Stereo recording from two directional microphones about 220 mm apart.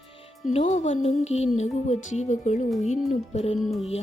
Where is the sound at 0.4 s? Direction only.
35° left (ahead or behind).